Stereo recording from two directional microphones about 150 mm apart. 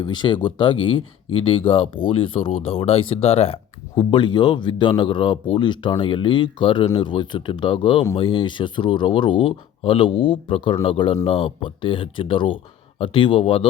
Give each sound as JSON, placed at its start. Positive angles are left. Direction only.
{"t": 0.0, "sound": "speech", "side_deg": 30}